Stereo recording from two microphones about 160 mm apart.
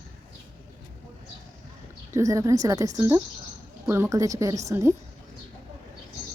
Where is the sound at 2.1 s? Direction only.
20° right (ahead or behind).